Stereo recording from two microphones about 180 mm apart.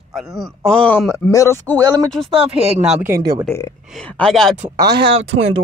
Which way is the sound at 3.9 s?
5° left (ahead or behind).